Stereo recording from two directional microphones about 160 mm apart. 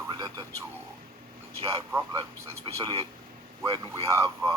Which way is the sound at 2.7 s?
30° right (ahead or behind).